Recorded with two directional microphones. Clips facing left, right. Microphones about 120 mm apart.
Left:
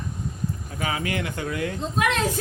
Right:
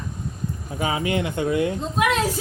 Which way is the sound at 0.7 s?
25° right (ahead or behind).